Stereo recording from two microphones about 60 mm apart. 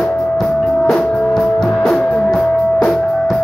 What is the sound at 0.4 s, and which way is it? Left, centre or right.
Music, centre.